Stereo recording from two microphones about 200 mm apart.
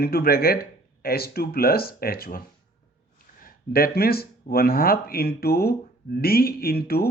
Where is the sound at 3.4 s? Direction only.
50° left (ahead or behind).